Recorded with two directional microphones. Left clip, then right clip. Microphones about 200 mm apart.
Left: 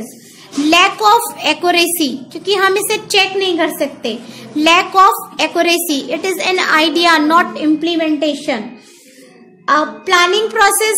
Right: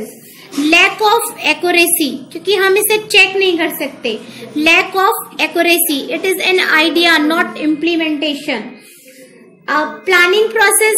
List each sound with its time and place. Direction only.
0.7 s a woman's voice: 60° left (ahead or behind)
9.7 s a woman's voice: 60° left (ahead or behind)